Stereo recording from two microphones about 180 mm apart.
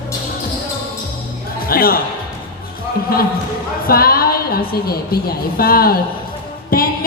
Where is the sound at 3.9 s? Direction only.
55° left (ahead or behind).